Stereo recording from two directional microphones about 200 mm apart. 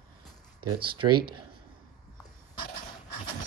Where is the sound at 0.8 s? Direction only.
25° right (ahead or behind).